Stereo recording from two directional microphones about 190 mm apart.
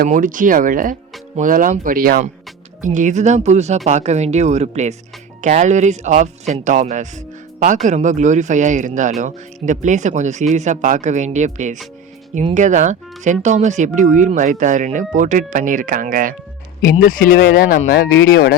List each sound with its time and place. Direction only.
0.0 s speech: 45° right (ahead or behind)
16.8 s speech: 50° left (ahead or behind)